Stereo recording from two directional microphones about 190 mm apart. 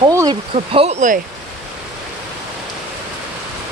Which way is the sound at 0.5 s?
30° right (ahead or behind).